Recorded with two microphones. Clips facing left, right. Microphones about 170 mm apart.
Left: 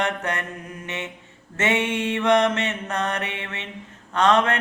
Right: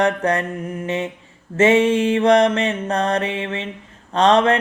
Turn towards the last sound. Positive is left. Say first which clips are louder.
# right 5 dB
turn(degrees=-30)  # may be behind; listen again after turning